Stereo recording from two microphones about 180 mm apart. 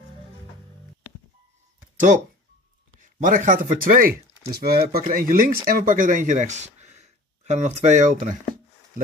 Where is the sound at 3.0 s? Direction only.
45° right (ahead or behind).